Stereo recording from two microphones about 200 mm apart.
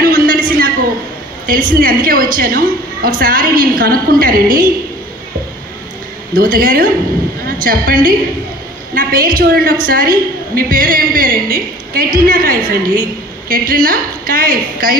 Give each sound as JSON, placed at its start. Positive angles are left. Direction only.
{"t": 0.0, "sound": "a sound", "side_deg": -45}
{"t": 1.5, "sound": "a woman's voice", "side_deg": -45}
{"t": 6.3, "sound": "a woman's voice", "side_deg": -45}